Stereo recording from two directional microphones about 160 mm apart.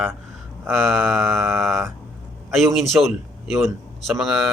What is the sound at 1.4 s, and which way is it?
Mantra, 15° right (ahead or behind).